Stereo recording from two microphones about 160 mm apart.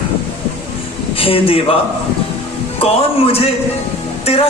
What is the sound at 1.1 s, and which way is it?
Speech, 35° left (ahead or behind).